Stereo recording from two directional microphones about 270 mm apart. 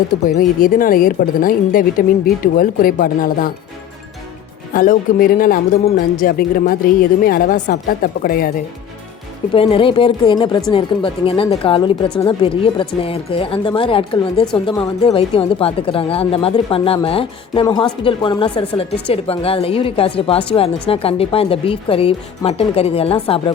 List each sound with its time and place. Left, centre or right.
0.3 s a woman's voice: left
4.7 s a woman's voice: left
9.6 s speech: centre
12.0 s a woman's voice: centre
12.3 s speech: centre